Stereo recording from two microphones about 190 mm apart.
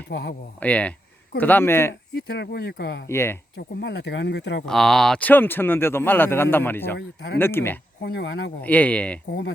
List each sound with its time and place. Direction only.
0.1 s speech: 55° left (ahead or behind)
0.6 s speech: 5° left (ahead or behind)
2.1 s speech: 60° left (ahead or behind)
3.1 s speech: 15° left (ahead or behind)
3.8 s speech: 60° left (ahead or behind)
4.6 s speech: centre (ahead or behind)
6.9 s speech: 60° left (ahead or behind)
7.3 s speech: 10° left (ahead or behind)
8.0 s speech: 60° left (ahead or behind)
8.6 s speech: 10° left (ahead or behind)